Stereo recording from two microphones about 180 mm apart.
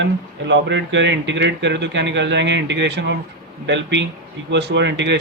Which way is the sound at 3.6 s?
85° right.